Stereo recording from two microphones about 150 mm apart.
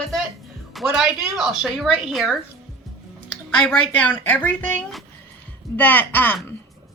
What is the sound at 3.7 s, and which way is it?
Speech, 10° left (ahead or behind).